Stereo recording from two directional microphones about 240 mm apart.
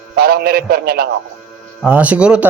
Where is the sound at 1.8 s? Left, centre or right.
Centre.